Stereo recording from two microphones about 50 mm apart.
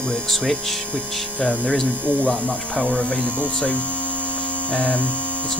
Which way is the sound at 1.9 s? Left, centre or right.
Right.